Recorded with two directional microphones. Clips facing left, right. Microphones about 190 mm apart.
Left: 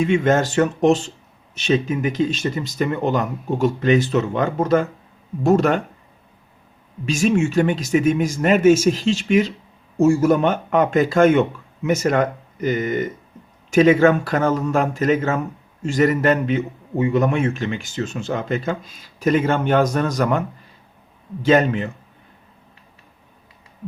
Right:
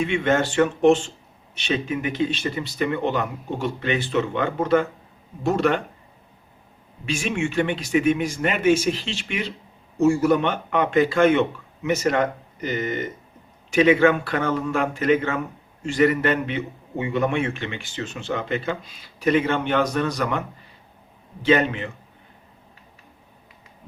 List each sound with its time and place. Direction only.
0.0 s a man's voice: 40° left (ahead or behind)
7.0 s a man's voice: 40° left (ahead or behind)
21.4 s a man's voice: 45° left (ahead or behind)